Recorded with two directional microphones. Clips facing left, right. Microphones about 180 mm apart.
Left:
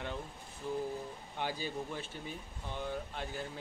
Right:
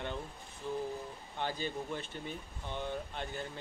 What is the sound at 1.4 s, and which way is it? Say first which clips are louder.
Speech: right 1 dB; 10° left (ahead or behind).